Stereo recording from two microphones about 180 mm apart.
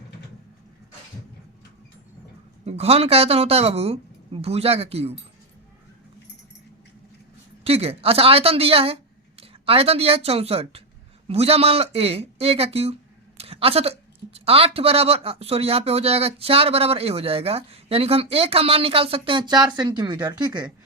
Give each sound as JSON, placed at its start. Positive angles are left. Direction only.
{"t": 2.6, "sound": "speech", "side_deg": -35}
{"t": 7.6, "sound": "speech", "side_deg": -35}